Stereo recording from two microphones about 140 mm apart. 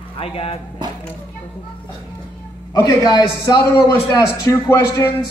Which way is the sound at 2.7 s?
30° left (ahead or behind).